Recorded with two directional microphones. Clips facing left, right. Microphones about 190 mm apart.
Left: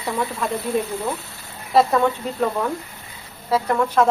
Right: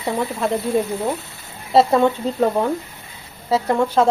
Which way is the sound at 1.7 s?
25° right (ahead or behind).